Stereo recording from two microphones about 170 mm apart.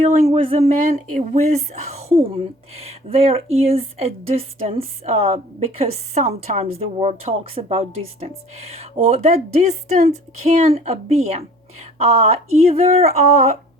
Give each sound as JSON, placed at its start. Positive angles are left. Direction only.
{"t": 0.3, "sound": "speech", "side_deg": -35}